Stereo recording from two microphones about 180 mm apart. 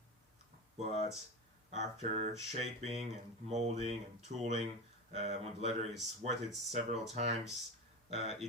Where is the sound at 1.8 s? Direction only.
40° right (ahead or behind).